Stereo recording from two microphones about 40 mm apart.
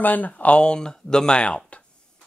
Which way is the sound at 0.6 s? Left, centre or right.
Left.